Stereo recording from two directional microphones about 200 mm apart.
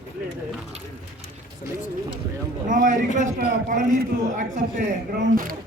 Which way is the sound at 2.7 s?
40° right (ahead or behind).